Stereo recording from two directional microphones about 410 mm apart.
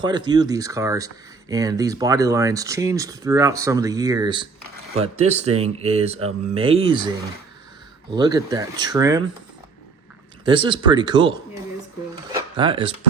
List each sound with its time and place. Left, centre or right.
0.0 s speech: centre
8.1 s speech: centre
10.4 s speech: centre
12.3 s a sound: centre